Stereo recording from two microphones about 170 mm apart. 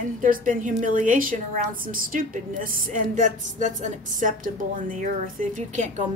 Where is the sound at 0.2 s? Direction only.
50° right (ahead or behind).